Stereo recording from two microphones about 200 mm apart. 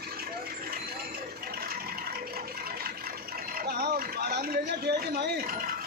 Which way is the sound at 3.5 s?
50° right (ahead or behind).